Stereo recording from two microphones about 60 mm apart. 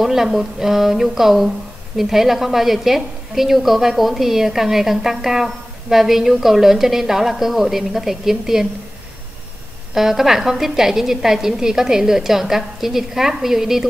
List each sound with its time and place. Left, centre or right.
0.0 s a woman's voice: centre
9.9 s a woman's voice: centre